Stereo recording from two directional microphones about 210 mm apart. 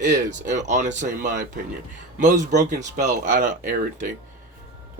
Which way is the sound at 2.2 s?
35° right (ahead or behind).